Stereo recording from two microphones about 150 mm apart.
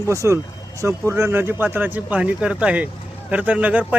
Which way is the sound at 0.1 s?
20° right (ahead or behind).